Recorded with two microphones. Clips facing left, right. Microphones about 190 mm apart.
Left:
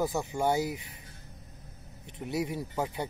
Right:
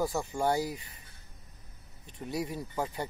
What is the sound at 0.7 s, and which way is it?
Speech, 70° left (ahead or behind).